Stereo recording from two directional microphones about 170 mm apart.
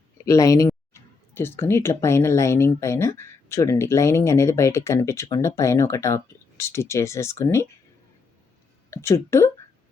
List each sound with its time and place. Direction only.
0.3 s speech: 20° left (ahead or behind)
8.9 s speech: 15° left (ahead or behind)